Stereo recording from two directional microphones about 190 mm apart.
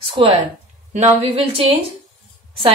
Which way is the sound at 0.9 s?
30° right (ahead or behind).